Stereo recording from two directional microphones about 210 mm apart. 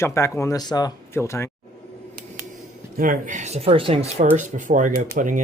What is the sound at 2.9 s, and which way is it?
Speech, 40° right (ahead or behind).